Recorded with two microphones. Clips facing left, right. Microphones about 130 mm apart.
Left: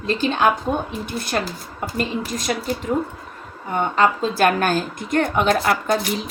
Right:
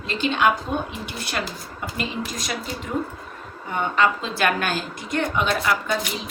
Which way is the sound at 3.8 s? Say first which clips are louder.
Left 3 dB; 40° left (ahead or behind).